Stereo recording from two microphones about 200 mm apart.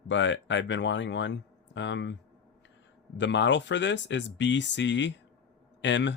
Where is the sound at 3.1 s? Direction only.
65° left (ahead or behind).